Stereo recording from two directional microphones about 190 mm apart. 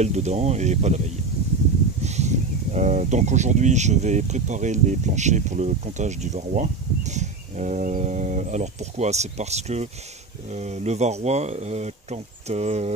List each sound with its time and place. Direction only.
0.0 s speech: 35° right (ahead or behind)
2.0 s speech: 35° right (ahead or behind)